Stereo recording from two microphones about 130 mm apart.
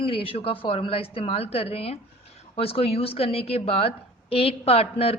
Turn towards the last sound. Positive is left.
turn(degrees=50)  # may be behind; listen again after turning